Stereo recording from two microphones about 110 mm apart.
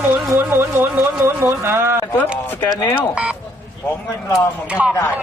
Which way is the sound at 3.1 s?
10° right (ahead or behind).